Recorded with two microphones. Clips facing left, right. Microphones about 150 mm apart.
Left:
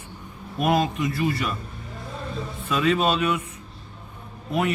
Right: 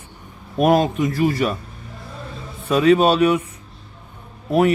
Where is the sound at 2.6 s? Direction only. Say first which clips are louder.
Right 7 dB; 40° right (ahead or behind).